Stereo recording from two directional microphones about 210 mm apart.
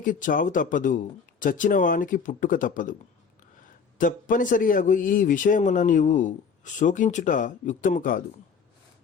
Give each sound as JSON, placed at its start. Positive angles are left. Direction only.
{"t": 0.0, "sound": "a man's voice", "side_deg": 40}
{"t": 3.9, "sound": "a man's voice", "side_deg": 40}